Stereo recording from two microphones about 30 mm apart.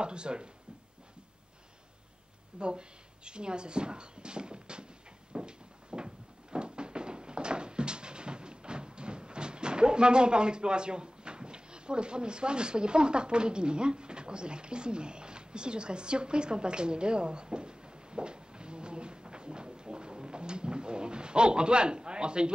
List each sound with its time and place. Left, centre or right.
0.0 s speech: right
2.6 s speech: right
5.3 s cupboard open or close: right